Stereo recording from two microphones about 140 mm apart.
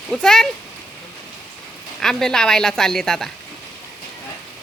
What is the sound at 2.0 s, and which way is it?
A woman's voice, 5° left (ahead or behind).